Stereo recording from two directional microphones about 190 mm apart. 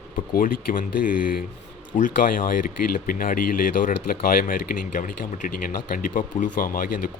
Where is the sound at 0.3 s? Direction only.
45° left (ahead or behind).